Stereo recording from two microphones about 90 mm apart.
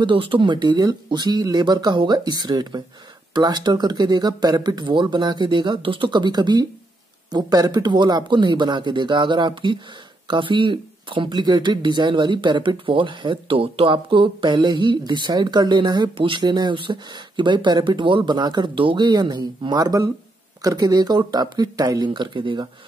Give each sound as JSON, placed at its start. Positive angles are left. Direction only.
{"t": 0.0, "sound": "speech", "side_deg": -75}